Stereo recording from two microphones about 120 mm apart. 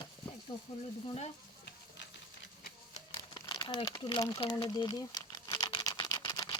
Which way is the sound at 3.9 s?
45° left (ahead or behind).